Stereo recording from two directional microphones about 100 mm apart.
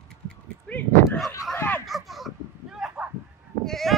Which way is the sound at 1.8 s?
Centre (ahead or behind).